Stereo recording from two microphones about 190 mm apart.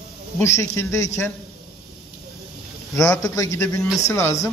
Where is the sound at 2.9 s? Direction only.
15° left (ahead or behind).